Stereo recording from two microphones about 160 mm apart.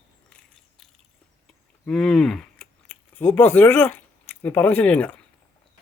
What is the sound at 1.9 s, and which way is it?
Speech, 5° left (ahead or behind).